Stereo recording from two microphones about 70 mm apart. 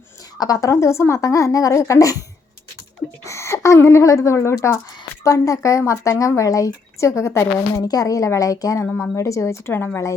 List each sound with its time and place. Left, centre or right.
0.3 s a woman's voice: left
3.2 s a woman's voice: left
7.8 s a woman's voice: left
8.8 s a woman's voice: left
9.2 s a woman's voice: left